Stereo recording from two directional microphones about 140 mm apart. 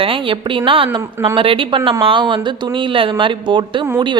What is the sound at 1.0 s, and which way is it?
Speech, 15° right (ahead or behind).